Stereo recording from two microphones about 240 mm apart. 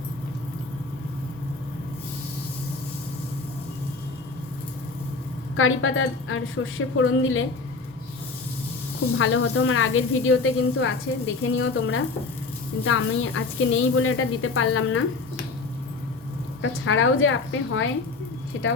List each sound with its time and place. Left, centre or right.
5.5 s a woman's voice: left
9.1 s a woman's voice: left
16.6 s a woman's voice: left